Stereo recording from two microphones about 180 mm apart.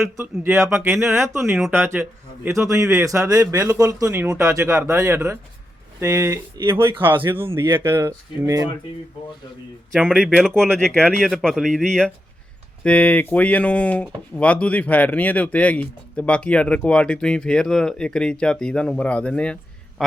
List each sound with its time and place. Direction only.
0.2 s speech: 15° right (ahead or behind)
10.2 s speech: centre (ahead or behind)